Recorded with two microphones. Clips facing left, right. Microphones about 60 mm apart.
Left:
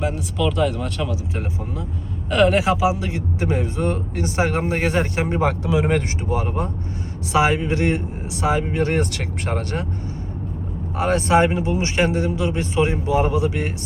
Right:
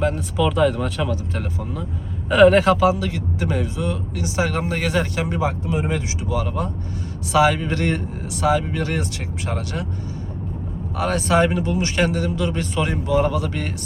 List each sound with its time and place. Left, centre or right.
0.3 s speech: centre
1.1 s speech: centre
2.3 s speech: centre
2.6 s speech: centre
3.0 s speech: left
3.8 s speech: left
5.9 s speech: left
9.0 s speech: left
9.5 s speech: left
10.9 s speech: left